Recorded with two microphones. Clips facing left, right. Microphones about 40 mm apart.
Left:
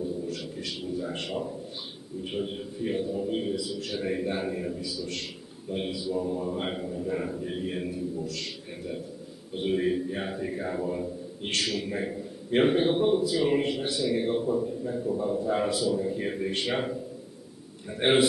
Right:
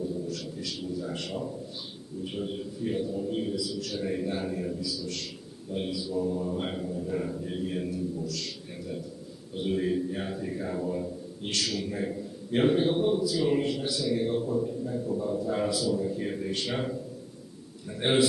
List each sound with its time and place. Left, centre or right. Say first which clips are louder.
0.0 s a sound: left 1 dB; left
2.2 s a man's voice: left 1 dB; left
4.7 s a man's voice: even; left
17.9 s a man's voice: left 3 dB; left